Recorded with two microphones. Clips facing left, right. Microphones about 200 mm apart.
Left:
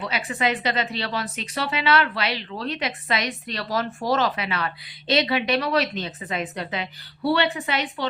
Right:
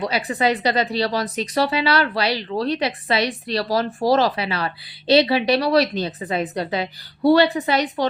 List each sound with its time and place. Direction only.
0.0 s speech: 35° right (ahead or behind)